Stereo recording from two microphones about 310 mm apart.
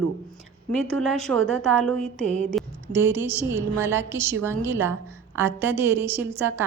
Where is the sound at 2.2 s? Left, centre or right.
Left.